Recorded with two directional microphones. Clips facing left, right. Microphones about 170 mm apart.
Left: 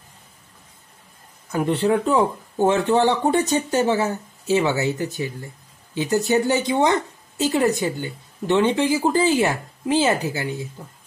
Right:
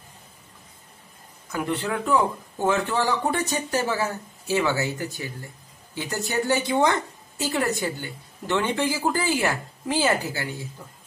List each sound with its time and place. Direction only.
1.5 s a woman's voice: 30° left (ahead or behind)